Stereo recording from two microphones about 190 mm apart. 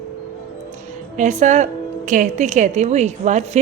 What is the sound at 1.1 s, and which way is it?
A woman's voice, 40° right (ahead or behind).